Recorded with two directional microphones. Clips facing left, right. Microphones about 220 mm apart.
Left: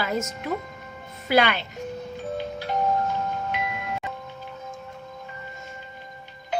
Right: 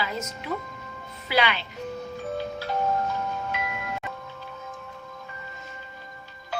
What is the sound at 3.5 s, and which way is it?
Chime, 15° left (ahead or behind).